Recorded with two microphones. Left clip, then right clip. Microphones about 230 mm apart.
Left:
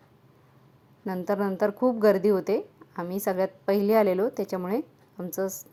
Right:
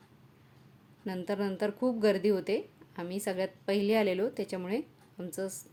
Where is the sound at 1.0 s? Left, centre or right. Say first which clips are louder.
Left 6 dB; centre.